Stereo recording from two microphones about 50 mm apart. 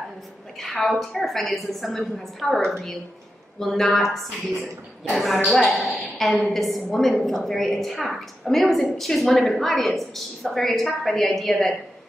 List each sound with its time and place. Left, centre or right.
0.6 s a woman's voice: centre